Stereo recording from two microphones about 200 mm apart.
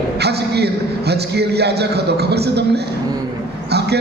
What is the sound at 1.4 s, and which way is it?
Speech, 55° right (ahead or behind).